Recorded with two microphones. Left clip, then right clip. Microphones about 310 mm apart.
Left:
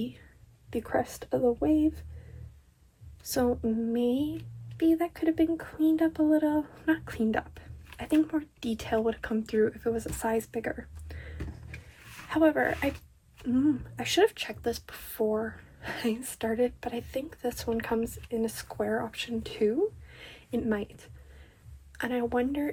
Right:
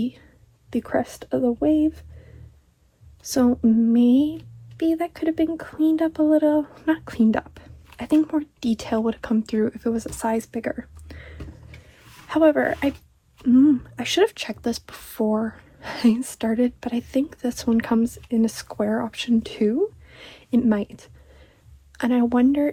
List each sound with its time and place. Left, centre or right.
0.7 s speech: centre
3.2 s speech: centre
11.1 s a sound: centre
12.3 s speech: centre